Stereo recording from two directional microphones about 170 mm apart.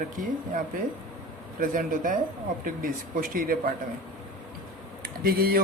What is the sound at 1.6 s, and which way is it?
Speech, 55° right (ahead or behind).